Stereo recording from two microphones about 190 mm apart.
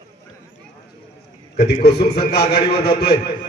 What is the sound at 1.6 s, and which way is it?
A man's voice, 60° left (ahead or behind).